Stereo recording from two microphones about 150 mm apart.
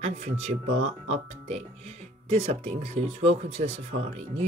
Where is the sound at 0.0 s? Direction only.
45° right (ahead or behind).